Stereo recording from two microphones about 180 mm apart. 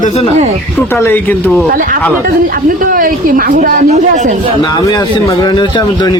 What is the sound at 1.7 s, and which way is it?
A woman's voice, 50° right (ahead or behind).